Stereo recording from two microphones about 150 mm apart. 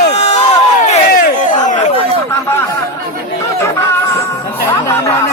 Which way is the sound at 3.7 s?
20° left (ahead or behind).